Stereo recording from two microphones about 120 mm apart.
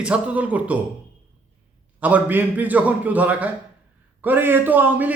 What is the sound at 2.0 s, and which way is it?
A man's voice, 15° right (ahead or behind).